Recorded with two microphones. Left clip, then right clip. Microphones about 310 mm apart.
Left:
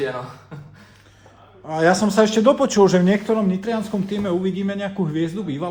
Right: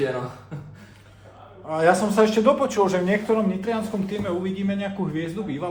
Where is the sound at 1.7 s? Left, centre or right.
Left.